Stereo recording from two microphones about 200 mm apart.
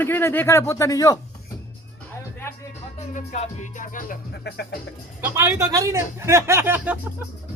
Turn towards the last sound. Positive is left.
turn(degrees=-10)  # may be behind; listen again after turning